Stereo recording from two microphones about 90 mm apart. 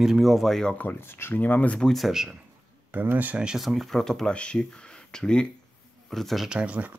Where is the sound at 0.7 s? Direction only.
25° left (ahead or behind).